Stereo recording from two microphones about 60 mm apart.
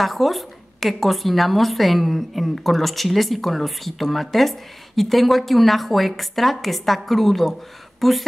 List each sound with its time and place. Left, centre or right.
0.0 s a woman's voice: centre